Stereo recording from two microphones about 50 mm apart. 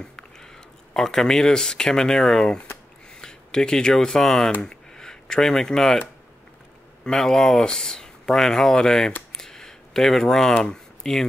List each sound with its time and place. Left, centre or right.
0.0 s speech: centre
7.1 s speech: centre
9.4 s a sound: centre
10.6 s speech: centre